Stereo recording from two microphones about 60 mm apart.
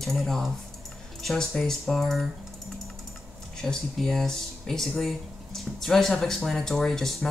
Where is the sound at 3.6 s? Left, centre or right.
Centre.